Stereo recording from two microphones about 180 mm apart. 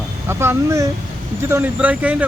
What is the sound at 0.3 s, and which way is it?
Speech, 15° right (ahead or behind).